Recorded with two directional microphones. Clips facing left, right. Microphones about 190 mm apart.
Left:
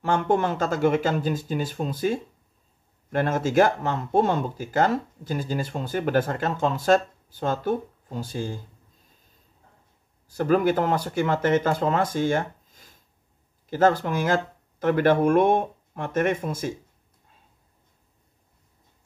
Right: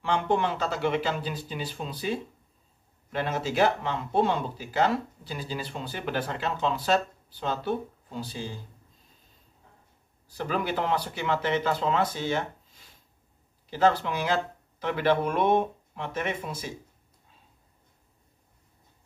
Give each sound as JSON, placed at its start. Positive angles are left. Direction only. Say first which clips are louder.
{"t": 0.0, "sound": "speech", "louder": "left 3 dB", "side_deg": 45}
{"t": 10.2, "sound": "speech", "louder": "left 9 dB", "side_deg": 45}